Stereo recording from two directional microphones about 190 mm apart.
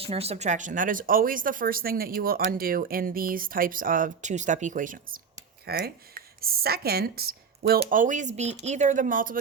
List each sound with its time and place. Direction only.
0.0 s speech: 30° right (ahead or behind)
5.6 s speech: 55° right (ahead or behind)
7.9 s speech: 45° right (ahead or behind)